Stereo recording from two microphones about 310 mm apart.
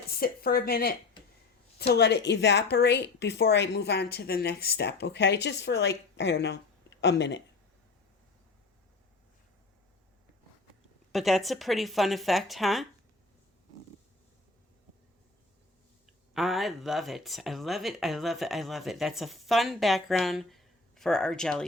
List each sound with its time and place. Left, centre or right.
0.2 s a woman's voice: left
11.1 s speech: centre
16.3 s speech: centre